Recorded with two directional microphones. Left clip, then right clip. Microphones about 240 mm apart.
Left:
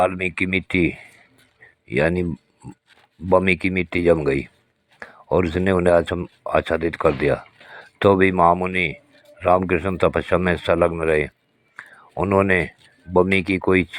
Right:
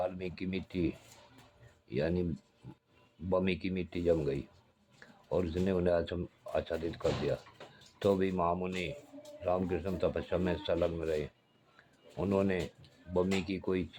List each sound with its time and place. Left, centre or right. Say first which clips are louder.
0.0 s speech: left 17 dB; left
3.2 s speech: left 15 dB; left
11.8 s a sound: left 14 dB; left
13.1 s speech: left 15 dB; left